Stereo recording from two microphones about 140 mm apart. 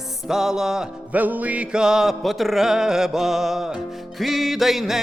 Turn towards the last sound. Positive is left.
turn(degrees=0)  # may be behind; listen again after turning